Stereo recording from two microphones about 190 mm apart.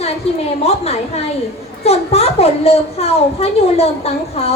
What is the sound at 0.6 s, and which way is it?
A woman's voice, 35° left (ahead or behind).